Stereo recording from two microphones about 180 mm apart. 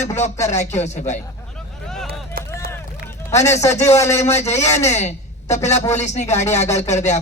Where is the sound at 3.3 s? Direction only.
40° left (ahead or behind).